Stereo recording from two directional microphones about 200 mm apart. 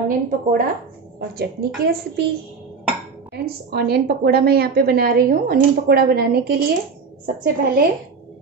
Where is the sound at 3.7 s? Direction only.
50° right (ahead or behind).